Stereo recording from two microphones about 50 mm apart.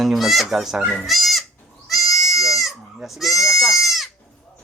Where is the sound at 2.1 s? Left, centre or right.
Left.